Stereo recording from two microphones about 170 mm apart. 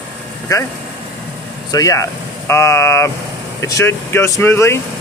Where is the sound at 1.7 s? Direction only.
20° left (ahead or behind).